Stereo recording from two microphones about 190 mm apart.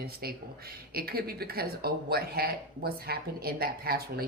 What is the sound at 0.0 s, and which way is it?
Speech, 55° right (ahead or behind).